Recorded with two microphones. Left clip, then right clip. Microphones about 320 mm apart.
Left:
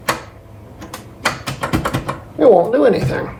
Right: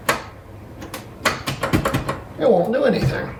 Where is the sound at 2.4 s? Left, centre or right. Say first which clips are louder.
Left 6 dB; centre.